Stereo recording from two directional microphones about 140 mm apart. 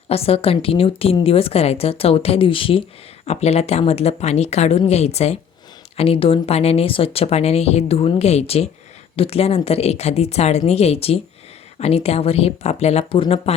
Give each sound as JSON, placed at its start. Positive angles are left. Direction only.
{"t": 0.1, "sound": "a woman's voice", "side_deg": 45}
{"t": 3.2, "sound": "a woman's voice", "side_deg": 50}